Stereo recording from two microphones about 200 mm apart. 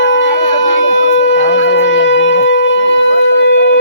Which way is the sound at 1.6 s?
65° left (ahead or behind).